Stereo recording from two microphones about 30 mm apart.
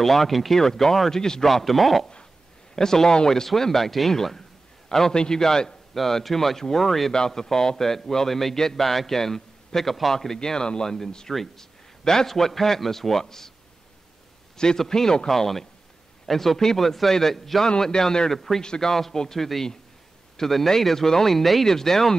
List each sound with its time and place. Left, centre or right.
0.0 s speech: centre
1.1 s speech: centre
1.5 s speech: centre
2.7 s a man's voice: centre
5.9 s speech: centre
10.1 s a man's voice: centre
14.8 s a man's voice: centre
17.6 s a man's voice: left
18.3 s speech: centre
21.6 s speech: centre